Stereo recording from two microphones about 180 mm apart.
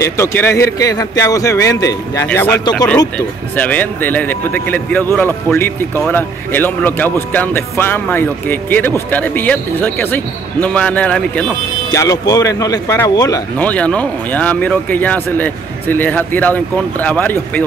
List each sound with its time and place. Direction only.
0.0 s speech: 15° left (ahead or behind)
11.9 s speech: 20° left (ahead or behind)
13.6 s speech: 5° left (ahead or behind)